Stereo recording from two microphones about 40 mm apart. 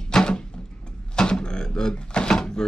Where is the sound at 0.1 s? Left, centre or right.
Left.